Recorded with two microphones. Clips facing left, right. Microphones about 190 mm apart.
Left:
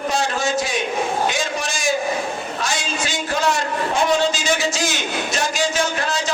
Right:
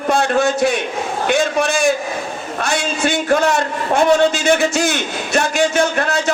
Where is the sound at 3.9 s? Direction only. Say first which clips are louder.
Right 7 dB; 60° right (ahead or behind).